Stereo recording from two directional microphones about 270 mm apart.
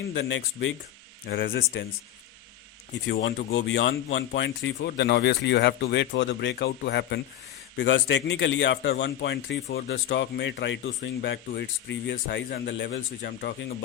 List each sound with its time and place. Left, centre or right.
0.1 s speech: left
3.1 s speech: left